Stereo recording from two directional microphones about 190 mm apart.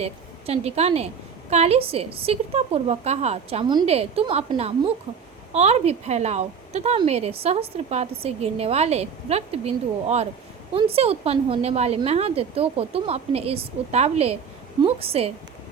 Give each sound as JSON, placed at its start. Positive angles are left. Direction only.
{"t": 0.0, "sound": "a woman's voice", "side_deg": -35}